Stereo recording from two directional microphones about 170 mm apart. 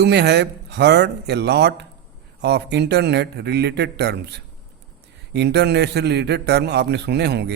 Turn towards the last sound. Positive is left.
turn(degrees=-75)  # may be behind; listen again after turning